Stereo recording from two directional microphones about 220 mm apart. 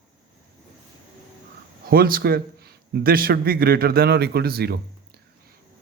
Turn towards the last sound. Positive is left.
turn(degrees=-45)  # may be behind; listen again after turning